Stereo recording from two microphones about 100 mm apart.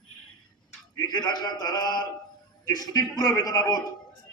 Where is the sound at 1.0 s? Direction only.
45° left (ahead or behind).